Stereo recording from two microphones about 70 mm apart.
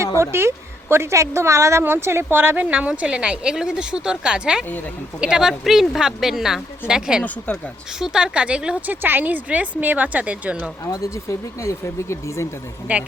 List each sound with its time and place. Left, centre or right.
0.2 s a woman's voice: right
2.6 s a woman's voice: centre
8.9 s speech: right
10.9 s speech: left
12.9 s speech: right